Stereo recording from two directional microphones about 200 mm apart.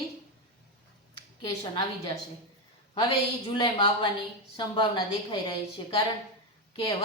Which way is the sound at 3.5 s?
25° left (ahead or behind).